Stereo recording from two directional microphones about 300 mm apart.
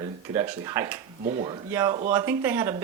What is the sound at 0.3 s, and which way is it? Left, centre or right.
Speech, centre.